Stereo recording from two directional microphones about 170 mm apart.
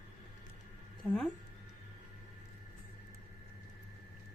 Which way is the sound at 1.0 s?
Centre (ahead or behind).